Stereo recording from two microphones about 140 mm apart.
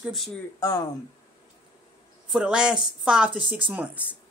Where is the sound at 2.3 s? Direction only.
5° right (ahead or behind).